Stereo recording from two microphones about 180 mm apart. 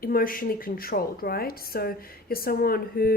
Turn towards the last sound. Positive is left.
turn(degrees=55)  # may be behind; listen again after turning